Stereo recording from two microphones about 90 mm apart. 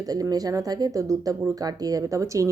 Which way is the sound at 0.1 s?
45° right (ahead or behind).